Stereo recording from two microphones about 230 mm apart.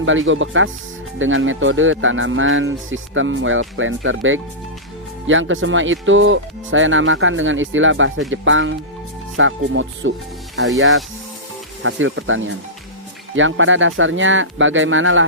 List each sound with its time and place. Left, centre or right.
0.0 s speech: right
10.5 s speech: centre
11.8 s speech: right